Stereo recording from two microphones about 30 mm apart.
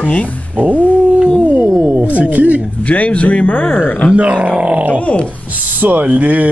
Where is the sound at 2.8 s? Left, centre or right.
Left.